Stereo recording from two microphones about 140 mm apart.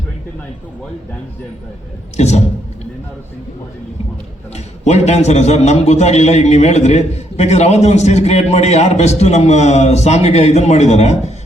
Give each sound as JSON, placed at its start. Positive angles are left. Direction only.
{"t": 2.1, "sound": "a man's voice", "side_deg": 50}
{"t": 4.5, "sound": "a man's voice", "side_deg": 50}